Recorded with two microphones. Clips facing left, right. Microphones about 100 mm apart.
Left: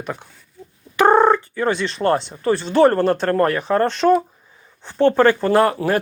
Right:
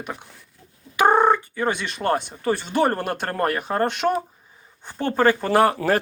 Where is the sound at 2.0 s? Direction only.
15° right (ahead or behind).